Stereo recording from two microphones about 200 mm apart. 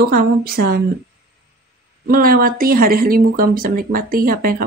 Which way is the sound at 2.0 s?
45° right (ahead or behind).